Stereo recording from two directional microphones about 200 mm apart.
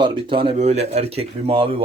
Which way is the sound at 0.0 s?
25° right (ahead or behind).